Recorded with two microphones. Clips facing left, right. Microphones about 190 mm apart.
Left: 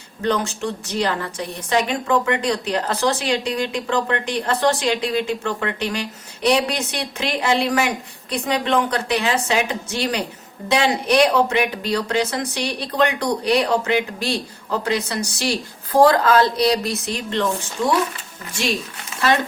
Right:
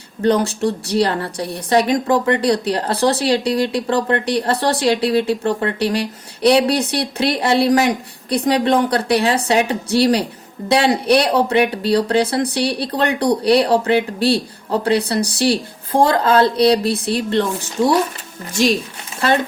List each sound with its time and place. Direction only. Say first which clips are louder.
0.2 s a woman's voice: right 6 dB; 35° right (ahead or behind)